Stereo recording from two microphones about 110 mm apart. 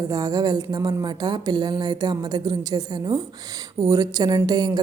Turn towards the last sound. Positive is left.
turn(degrees=-35)  # may be behind; listen again after turning